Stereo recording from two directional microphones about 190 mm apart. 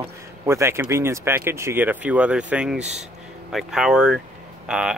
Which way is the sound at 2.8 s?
35° right (ahead or behind).